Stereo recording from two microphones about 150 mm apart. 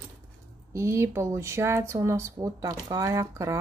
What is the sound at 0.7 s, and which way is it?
Speech, 20° right (ahead or behind).